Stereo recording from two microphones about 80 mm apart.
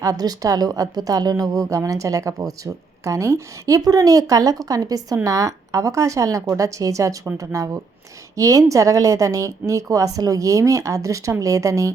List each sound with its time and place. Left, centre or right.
0.0 s a woman's voice: right
3.8 s a woman's voice: right